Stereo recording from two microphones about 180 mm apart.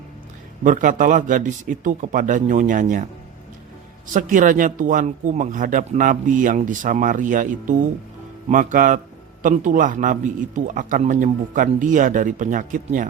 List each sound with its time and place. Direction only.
0.6 s speech: 45° right (ahead or behind)
4.1 s speech: 45° right (ahead or behind)